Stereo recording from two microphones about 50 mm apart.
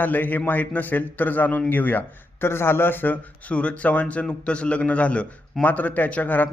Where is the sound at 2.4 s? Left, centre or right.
Left.